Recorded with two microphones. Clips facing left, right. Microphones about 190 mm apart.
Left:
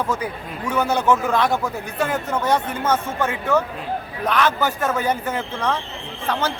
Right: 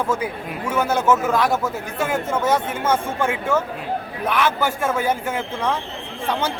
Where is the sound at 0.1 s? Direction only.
10° right (ahead or behind).